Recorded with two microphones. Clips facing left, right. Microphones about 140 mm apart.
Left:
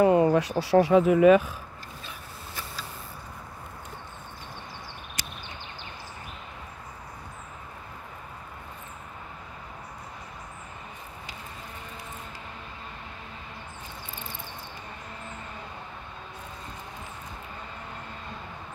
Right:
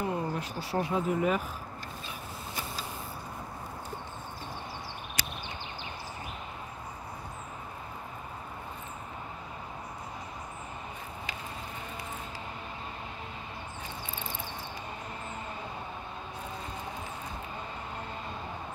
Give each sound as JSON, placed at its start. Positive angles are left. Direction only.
{"t": 0.0, "sound": "speech", "side_deg": 90}